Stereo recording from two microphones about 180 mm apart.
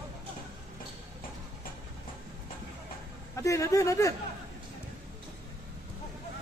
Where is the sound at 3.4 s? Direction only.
15° left (ahead or behind).